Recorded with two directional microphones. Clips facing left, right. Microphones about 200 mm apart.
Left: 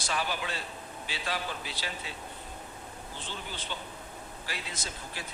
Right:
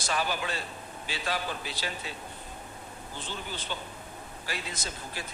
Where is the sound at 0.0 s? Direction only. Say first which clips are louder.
Right 2 dB; 45° right (ahead or behind).